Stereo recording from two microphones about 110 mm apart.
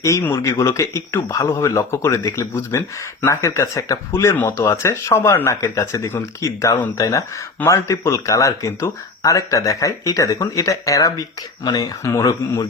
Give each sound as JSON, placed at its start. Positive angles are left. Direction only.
{"t": 0.0, "sound": "speech", "side_deg": 25}